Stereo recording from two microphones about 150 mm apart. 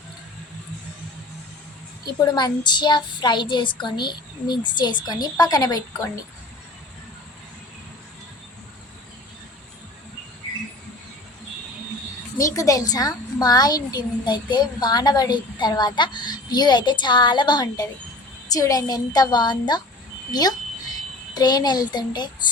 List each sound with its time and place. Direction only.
2.1 s a woman's voice: 30° left (ahead or behind)
12.5 s a woman's voice: 25° left (ahead or behind)